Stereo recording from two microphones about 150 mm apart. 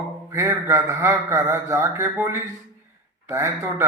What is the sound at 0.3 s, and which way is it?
A man's voice, 20° right (ahead or behind).